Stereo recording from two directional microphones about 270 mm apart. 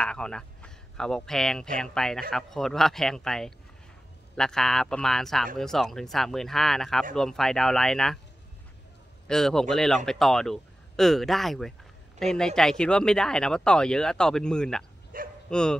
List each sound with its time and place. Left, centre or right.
0.0 s speech: centre
9.3 s speech: centre
15.1 s bow-wow: right
15.5 s speech: centre